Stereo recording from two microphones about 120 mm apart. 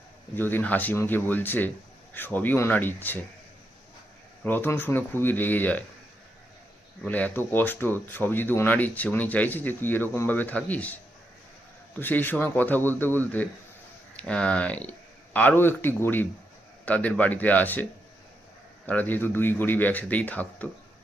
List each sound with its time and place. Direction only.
0.3 s speech: 15° left (ahead or behind)
4.4 s speech: 15° left (ahead or behind)
7.0 s speech: 10° left (ahead or behind)
18.9 s speech: 15° left (ahead or behind)